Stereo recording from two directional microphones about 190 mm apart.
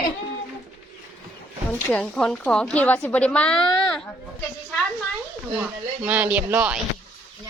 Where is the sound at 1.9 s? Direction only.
5° left (ahead or behind).